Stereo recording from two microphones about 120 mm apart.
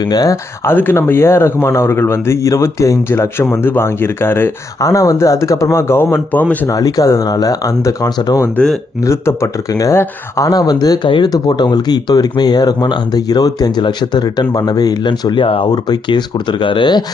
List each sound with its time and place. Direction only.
0.0 s speech: 30° left (ahead or behind)
0.7 s a man's voice: 20° left (ahead or behind)
6.7 s speech: 30° left (ahead or behind)
8.6 s speech: 10° left (ahead or behind)
9.0 s speech: 25° left (ahead or behind); by 17.0 s 40° left (ahead or behind)